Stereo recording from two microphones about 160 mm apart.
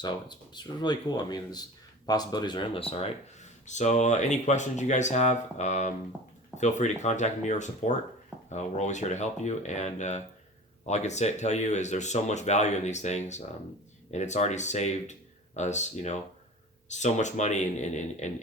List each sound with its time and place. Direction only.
0.0 s speech: 25° left (ahead or behind); by 18.3 s 50° left (ahead or behind)